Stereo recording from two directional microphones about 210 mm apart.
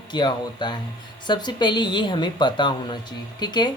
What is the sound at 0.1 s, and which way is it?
A woman's voice, 20° left (ahead or behind).